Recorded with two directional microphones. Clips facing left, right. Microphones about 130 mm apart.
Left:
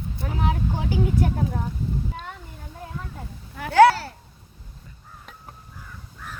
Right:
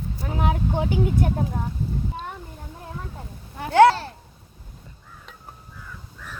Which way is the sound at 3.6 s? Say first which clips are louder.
Even; 25° right (ahead or behind).